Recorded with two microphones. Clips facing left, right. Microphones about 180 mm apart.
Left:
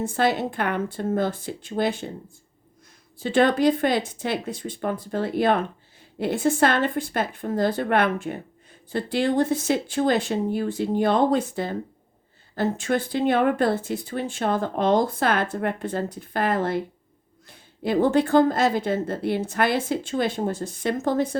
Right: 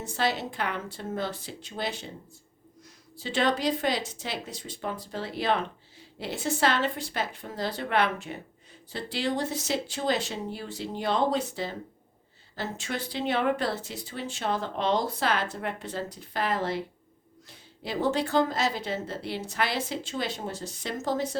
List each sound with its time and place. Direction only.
0.0 s speech: 50° left (ahead or behind)
3.2 s speech: 55° left (ahead or behind)